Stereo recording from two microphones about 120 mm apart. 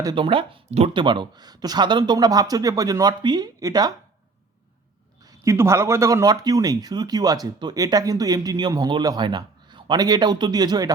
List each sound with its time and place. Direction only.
0.2 s speech: 45° right (ahead or behind)
0.9 s speech: 40° right (ahead or behind)
5.2 s speech: 25° right (ahead or behind)